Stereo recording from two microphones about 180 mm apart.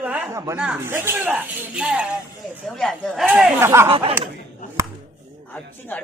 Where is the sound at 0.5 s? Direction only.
5° right (ahead or behind).